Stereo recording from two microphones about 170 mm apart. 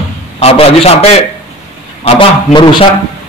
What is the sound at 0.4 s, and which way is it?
A man's voice, 35° left (ahead or behind).